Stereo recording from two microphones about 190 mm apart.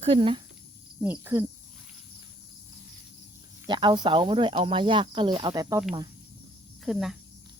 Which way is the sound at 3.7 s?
25° right (ahead or behind).